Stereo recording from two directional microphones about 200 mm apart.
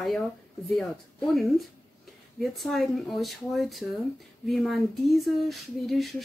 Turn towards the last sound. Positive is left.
turn(degrees=0)  # may be behind; listen again after turning